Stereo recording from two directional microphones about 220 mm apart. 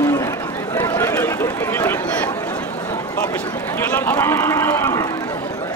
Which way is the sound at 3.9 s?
10° left (ahead or behind).